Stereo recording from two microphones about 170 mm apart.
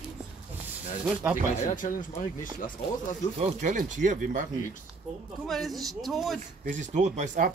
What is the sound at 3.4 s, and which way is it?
Speech, 45° right (ahead or behind).